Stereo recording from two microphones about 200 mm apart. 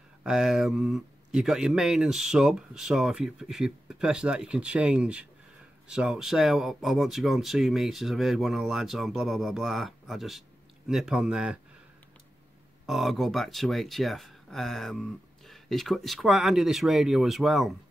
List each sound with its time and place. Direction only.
0.2 s speech: centre (ahead or behind)
12.8 s speech: centre (ahead or behind)